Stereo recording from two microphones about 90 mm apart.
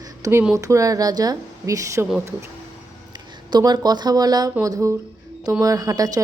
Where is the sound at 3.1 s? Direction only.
50° right (ahead or behind).